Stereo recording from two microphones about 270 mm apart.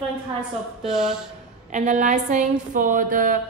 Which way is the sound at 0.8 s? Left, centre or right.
Centre.